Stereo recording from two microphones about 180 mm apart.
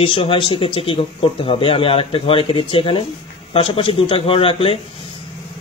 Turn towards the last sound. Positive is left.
turn(degrees=30)  # may be behind; listen again after turning